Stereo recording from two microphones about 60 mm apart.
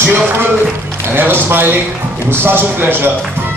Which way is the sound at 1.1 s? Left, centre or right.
Right.